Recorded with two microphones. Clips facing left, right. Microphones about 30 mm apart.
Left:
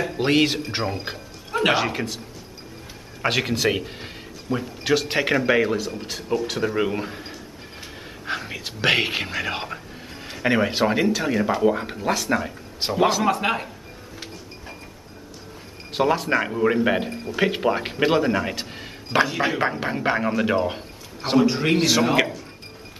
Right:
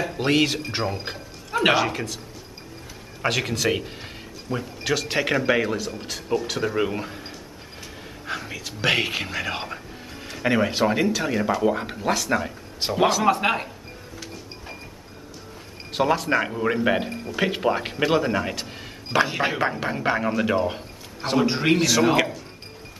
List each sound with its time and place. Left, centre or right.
0.0 s speech: centre
0.7 s a sound: centre
1.7 s a man's voice: centre
8.4 s speech: centre
15.9 s speech: centre
19.3 s speech: centre
19.6 s speech: centre
21.5 s a man's voice: centre
21.7 s speech: centre
22.1 s a sound: centre